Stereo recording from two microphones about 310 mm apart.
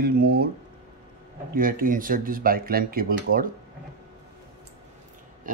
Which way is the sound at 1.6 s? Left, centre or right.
Right.